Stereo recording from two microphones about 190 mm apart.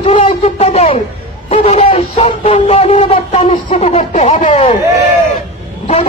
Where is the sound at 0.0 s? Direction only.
30° left (ahead or behind).